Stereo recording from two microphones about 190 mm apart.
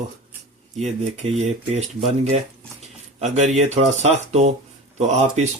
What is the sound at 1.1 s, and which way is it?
Speech, 35° right (ahead or behind).